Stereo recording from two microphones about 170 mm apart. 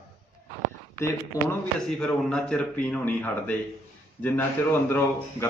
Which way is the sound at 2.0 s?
5° left (ahead or behind).